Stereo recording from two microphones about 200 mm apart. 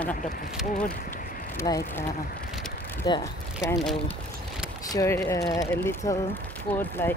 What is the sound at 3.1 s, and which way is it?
Speech, 20° left (ahead or behind).